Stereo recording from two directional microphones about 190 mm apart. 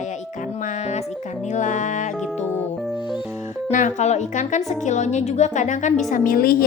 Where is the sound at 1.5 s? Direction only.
40° left (ahead or behind).